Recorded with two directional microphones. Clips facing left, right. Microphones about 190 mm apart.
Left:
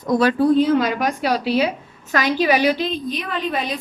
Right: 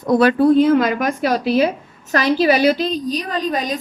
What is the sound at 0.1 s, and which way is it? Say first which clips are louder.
A woman's voice: right 3 dB; 60° right (ahead or behind).